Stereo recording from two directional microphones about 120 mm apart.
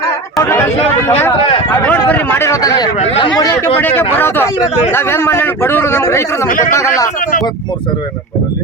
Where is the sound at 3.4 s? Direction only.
30° left (ahead or behind).